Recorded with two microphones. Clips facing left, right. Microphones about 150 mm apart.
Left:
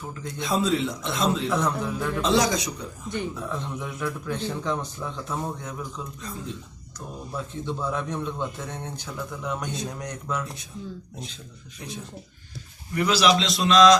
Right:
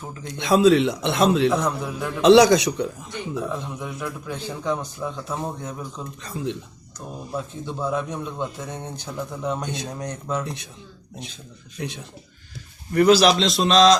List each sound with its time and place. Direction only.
0.3 s a man's voice: 75° right (ahead or behind)
1.5 s a man's voice: 15° right (ahead or behind)
2.2 s a man's voice: 75° right (ahead or behind)
3.4 s a man's voice: 10° right (ahead or behind)
6.2 s a man's voice: 75° right (ahead or behind)
7.3 s a man's voice: 15° right (ahead or behind)
9.4 s speech: 25° right (ahead or behind)
11.8 s a man's voice: 70° right (ahead or behind)
12.9 s a man's voice: 50° right (ahead or behind); by 13.9 s 30° right (ahead or behind)